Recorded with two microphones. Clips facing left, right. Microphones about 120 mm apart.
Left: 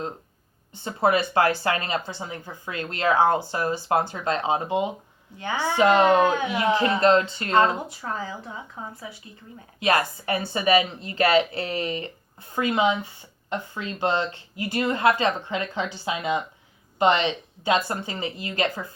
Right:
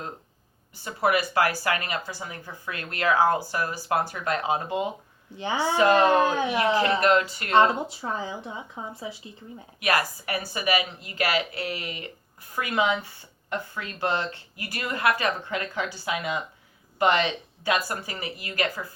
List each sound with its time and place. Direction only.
0.7 s speech: 25° left (ahead or behind)
5.4 s speech: 20° right (ahead or behind)
5.7 s speech: 20° left (ahead or behind)
7.8 s speech: 20° right (ahead or behind)
9.8 s speech: 25° left (ahead or behind)